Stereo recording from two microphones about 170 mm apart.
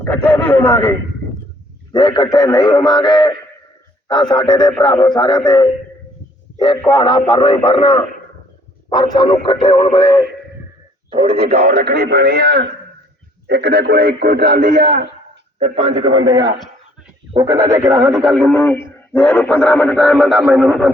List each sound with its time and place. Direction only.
0.0 s speech: 10° left (ahead or behind)
1.9 s a man's voice: 25° left (ahead or behind)
10.0 s speech: 15° left (ahead or behind)
11.1 s speech: 35° right (ahead or behind)
11.6 s speech: 65° right (ahead or behind)
15.5 s a man's voice: 40° right (ahead or behind); by 18.2 s 20° right (ahead or behind)
18.2 s speech: 5° left (ahead or behind)